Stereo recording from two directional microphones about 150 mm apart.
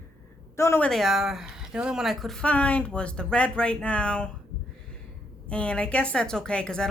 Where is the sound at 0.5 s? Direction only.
15° left (ahead or behind).